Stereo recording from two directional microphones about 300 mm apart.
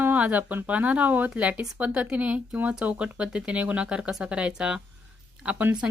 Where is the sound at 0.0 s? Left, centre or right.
Centre.